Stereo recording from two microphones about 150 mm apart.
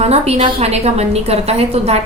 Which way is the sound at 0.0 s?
45° right (ahead or behind).